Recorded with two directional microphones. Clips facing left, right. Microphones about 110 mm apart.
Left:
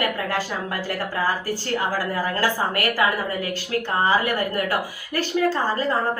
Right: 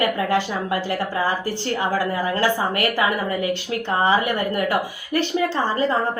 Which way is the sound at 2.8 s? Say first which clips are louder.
Right 1 dB; 20° right (ahead or behind).